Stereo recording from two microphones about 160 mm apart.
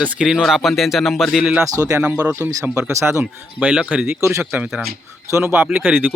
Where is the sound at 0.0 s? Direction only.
5° right (ahead or behind).